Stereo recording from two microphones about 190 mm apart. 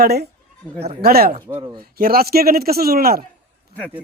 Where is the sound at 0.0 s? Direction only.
55° right (ahead or behind).